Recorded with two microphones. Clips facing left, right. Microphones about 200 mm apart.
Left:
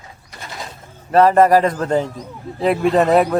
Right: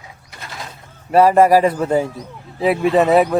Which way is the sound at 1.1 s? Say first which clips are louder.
Right 1 dB; 10° right (ahead or behind).